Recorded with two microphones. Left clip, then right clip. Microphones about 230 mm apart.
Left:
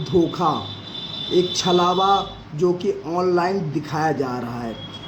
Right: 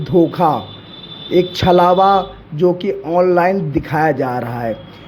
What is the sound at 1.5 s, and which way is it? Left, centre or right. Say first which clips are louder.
A man's voice: right 10 dB; right.